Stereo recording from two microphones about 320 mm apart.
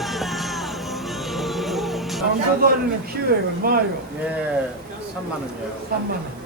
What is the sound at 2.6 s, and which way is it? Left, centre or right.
Speech, right.